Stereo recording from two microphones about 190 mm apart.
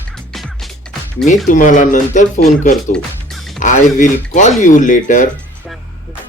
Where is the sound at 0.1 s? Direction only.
5° left (ahead or behind).